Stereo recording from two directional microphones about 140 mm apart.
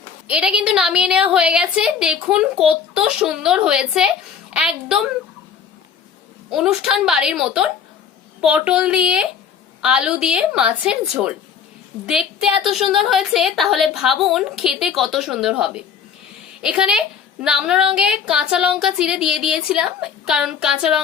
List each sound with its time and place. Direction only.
0.3 s a woman's voice: 5° right (ahead or behind)
6.5 s a woman's voice: 5° right (ahead or behind)